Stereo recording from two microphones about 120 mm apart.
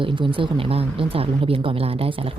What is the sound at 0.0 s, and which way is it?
A woman's voice, 45° right (ahead or behind).